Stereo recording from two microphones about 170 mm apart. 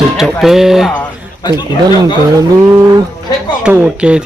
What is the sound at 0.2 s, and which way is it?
Speech, centre (ahead or behind).